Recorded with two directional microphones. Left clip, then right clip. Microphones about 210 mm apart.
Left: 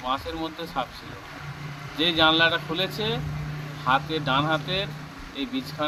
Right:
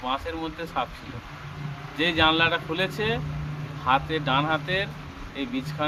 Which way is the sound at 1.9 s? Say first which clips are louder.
Left 1 dB; centre (ahead or behind).